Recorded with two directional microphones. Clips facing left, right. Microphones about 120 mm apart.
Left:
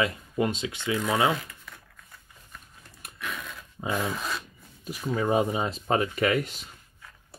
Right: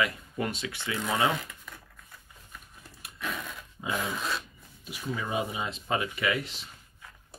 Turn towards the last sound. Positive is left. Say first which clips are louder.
# left 5 dB
turn(degrees=45)  # may be behind; listen again after turning